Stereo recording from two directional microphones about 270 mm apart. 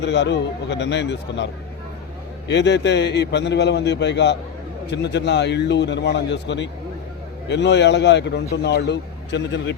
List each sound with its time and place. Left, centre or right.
0.0 s a man's voice: left
2.5 s a man's voice: left